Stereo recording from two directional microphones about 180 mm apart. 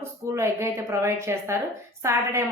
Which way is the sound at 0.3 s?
15° right (ahead or behind).